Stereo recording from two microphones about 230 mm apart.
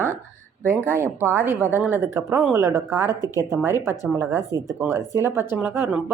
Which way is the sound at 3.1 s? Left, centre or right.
Centre.